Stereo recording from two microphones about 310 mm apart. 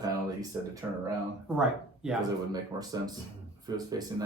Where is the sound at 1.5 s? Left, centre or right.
Centre.